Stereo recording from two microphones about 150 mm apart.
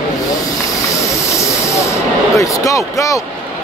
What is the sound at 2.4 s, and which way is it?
Speech, 20° left (ahead or behind).